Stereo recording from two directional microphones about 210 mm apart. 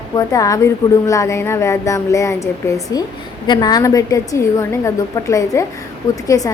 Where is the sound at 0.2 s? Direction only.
15° left (ahead or behind).